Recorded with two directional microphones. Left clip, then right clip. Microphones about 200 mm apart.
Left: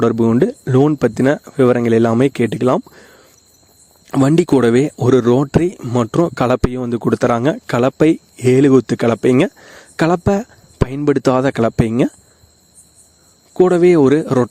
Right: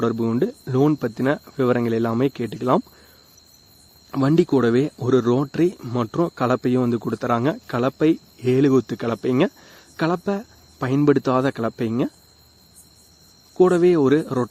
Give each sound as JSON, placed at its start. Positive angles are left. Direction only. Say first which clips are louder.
{"t": 0.0, "sound": "speech", "louder": "left 8 dB", "side_deg": 40}
{"t": 4.1, "sound": "speech", "louder": "left 5 dB", "side_deg": 45}
{"t": 13.6, "sound": "speech", "louder": "left 5 dB", "side_deg": 40}